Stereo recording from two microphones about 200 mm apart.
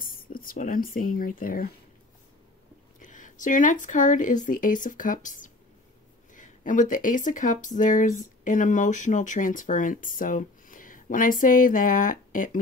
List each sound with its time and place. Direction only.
0.0 s speech: 45° left (ahead or behind)
3.0 s speech: 40° left (ahead or behind)